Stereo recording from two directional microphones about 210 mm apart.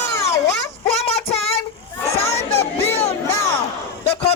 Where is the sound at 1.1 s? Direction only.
30° left (ahead or behind).